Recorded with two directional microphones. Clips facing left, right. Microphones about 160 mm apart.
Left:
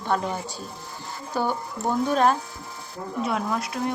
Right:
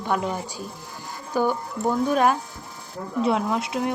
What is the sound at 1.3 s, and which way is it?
Speech, 10° right (ahead or behind).